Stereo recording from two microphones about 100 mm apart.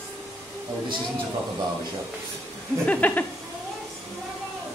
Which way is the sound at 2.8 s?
15° left (ahead or behind).